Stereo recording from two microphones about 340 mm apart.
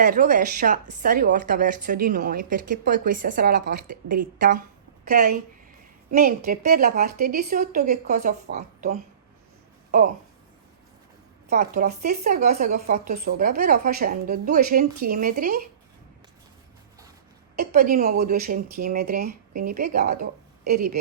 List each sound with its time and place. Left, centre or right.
0.0 s a woman's voice: right
11.5 s a woman's voice: right
17.6 s a woman's voice: right